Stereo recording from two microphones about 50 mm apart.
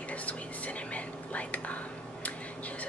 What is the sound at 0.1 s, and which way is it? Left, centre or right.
Whispering, left.